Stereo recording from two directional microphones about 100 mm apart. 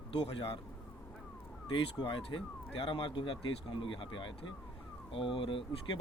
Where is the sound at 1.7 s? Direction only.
55° left (ahead or behind).